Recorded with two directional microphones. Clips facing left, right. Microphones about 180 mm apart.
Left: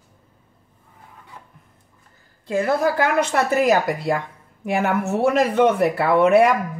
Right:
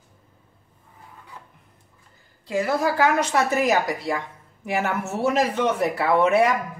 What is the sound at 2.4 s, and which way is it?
Speech, 55° left (ahead or behind).